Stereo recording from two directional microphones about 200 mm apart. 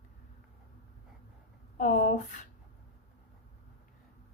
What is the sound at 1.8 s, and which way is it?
Speech, 40° left (ahead or behind).